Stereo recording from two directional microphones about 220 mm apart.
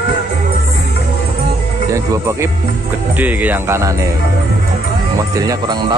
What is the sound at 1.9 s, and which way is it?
Speech, 15° right (ahead or behind).